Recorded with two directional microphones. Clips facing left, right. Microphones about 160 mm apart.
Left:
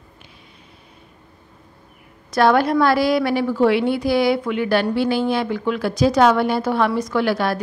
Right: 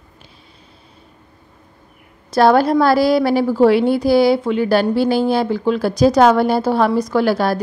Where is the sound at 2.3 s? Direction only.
35° right (ahead or behind).